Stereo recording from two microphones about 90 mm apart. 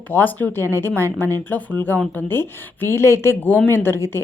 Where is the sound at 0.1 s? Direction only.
20° left (ahead or behind).